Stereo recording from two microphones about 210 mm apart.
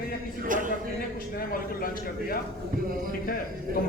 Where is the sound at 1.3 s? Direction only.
45° left (ahead or behind).